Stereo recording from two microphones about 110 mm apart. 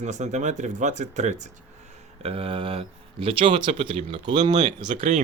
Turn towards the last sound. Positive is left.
turn(degrees=-85)